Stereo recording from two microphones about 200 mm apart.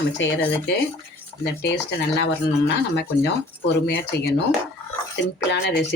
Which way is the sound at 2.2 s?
60° left (ahead or behind).